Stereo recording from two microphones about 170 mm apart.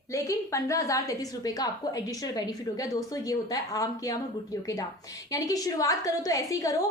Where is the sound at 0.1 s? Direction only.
20° left (ahead or behind).